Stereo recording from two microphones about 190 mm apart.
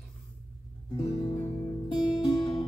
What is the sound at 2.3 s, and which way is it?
Music, 25° left (ahead or behind).